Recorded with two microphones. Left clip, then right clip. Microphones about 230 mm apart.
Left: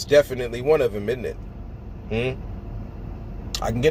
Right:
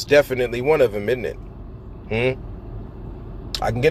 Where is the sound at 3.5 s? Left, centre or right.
Centre.